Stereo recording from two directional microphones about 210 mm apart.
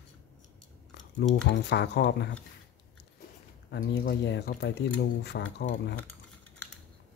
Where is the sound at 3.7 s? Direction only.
50° left (ahead or behind).